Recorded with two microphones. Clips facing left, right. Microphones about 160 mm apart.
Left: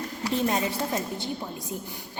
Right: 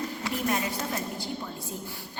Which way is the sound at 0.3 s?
25° left (ahead or behind).